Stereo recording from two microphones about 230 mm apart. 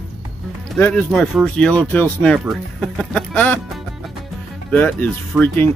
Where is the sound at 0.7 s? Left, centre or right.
Centre.